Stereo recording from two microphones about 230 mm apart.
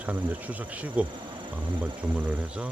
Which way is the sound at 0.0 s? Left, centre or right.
Centre.